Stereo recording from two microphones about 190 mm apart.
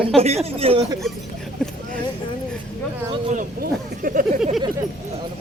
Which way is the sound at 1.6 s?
5° left (ahead or behind).